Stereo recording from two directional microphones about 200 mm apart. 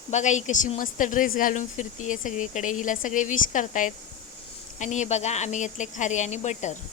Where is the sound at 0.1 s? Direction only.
35° left (ahead or behind).